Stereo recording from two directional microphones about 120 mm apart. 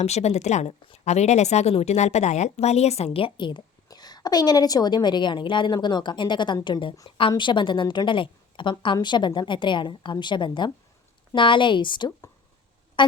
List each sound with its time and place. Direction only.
0.0 s speech: 65° left (ahead or behind); by 12.1 s 40° left (ahead or behind)
13.0 s music: 40° left (ahead or behind)